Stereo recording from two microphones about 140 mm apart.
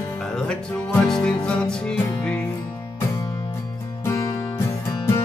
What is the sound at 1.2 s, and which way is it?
Music, 5° left (ahead or behind).